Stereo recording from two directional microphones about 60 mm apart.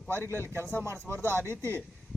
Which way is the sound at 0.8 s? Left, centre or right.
Right.